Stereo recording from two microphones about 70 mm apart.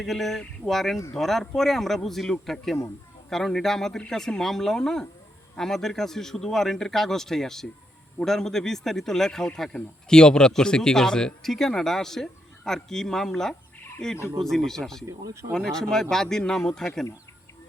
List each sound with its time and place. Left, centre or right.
0.0 s a man's voice: centre
15.0 s speech: right
15.5 s a man's voice: centre